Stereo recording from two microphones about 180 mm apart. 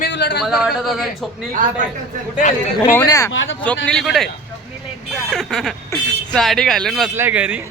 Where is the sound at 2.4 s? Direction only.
50° left (ahead or behind).